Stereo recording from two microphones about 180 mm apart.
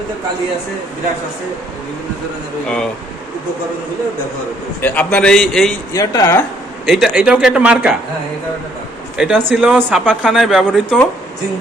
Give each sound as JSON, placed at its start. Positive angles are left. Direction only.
{"t": 2.6, "sound": "speech", "side_deg": 5}
{"t": 4.8, "sound": "speech", "side_deg": 10}
{"t": 5.9, "sound": "speech", "side_deg": 20}
{"t": 6.8, "sound": "speech", "side_deg": 0}
{"t": 9.1, "sound": "speech", "side_deg": -5}